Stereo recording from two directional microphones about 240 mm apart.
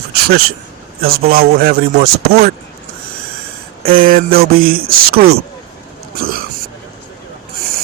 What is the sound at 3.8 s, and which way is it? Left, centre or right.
Speech, right.